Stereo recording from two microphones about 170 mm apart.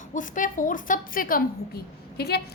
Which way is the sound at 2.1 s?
70° left (ahead or behind).